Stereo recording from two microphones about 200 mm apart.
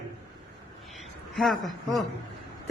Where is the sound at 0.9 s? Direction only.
Centre (ahead or behind).